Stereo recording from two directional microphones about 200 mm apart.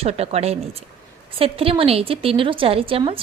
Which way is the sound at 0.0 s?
30° right (ahead or behind).